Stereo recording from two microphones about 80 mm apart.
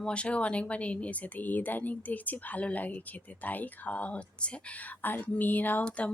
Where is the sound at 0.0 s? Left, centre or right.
Centre.